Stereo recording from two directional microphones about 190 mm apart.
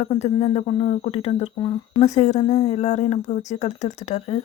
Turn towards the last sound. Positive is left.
turn(degrees=35)  # may be behind; listen again after turning